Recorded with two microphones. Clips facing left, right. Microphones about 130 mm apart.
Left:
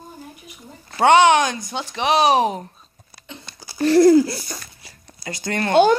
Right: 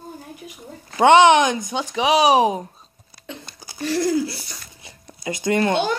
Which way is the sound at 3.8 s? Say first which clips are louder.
Left 8 dB; 45° left (ahead or behind).